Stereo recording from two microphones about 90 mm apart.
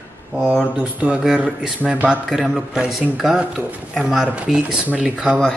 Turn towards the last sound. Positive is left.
turn(degrees=-10)  # may be behind; listen again after turning